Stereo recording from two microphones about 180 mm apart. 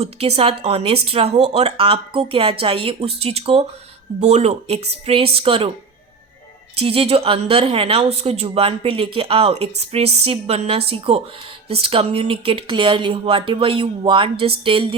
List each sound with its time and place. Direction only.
0.0 s a woman's voice: 35° right (ahead or behind)
6.7 s a woman's voice: 30° right (ahead or behind)